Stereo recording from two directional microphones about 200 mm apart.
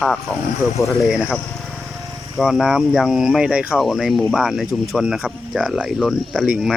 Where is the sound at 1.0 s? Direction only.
Centre (ahead or behind).